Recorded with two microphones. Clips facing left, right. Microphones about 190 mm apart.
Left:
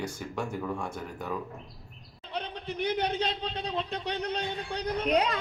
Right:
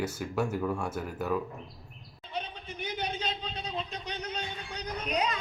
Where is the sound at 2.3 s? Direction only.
70° left (ahead or behind).